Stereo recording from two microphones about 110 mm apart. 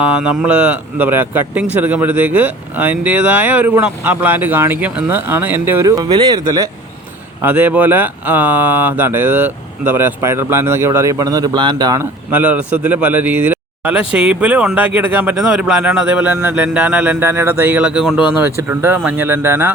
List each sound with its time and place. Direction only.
0.0 s speech: 10° right (ahead or behind); by 6.7 s 30° right (ahead or behind)
7.4 s speech: 15° right (ahead or behind); by 11.9 s 40° right (ahead or behind)
11.9 s speech: 15° right (ahead or behind)
18.3 s speech: 20° right (ahead or behind)